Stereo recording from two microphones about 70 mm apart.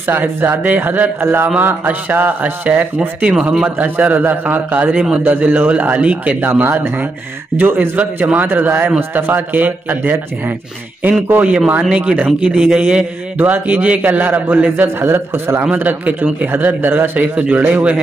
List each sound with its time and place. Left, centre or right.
0.1 s a man's voice: right
6.5 s a man's voice: right
11.4 s a man's voice: centre
15.0 s a man's voice: right